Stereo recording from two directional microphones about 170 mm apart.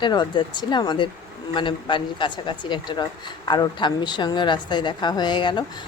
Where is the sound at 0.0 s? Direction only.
25° left (ahead or behind).